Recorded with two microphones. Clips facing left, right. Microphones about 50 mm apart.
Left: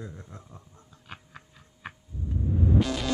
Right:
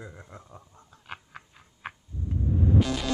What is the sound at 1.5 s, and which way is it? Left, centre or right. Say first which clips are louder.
Tick-tock: right 2 dB; right.